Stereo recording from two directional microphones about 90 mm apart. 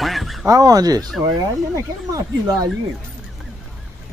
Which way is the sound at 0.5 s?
45° right (ahead or behind).